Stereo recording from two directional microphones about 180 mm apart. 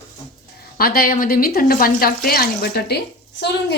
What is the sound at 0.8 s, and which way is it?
Speech, 55° left (ahead or behind).